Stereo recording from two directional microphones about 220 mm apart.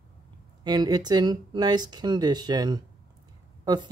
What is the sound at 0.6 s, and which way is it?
Speech, 20° right (ahead or behind).